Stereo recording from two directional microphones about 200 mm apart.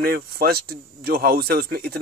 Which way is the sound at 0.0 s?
50° right (ahead or behind).